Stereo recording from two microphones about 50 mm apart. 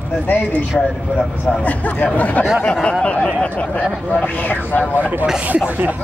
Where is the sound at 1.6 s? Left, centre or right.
Left.